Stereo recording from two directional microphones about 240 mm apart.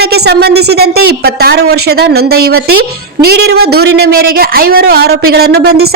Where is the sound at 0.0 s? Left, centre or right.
Right.